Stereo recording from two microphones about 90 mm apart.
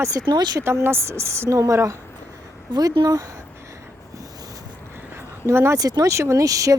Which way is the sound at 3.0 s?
40° right (ahead or behind).